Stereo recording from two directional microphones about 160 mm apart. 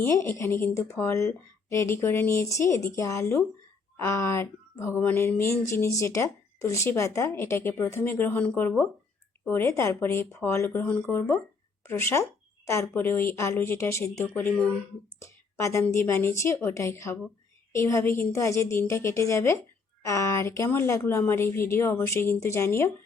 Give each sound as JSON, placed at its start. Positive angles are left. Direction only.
{"t": 0.0, "sound": "a woman's voice", "side_deg": 15}